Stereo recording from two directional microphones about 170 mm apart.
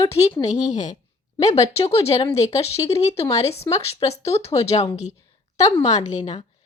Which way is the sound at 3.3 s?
40° left (ahead or behind).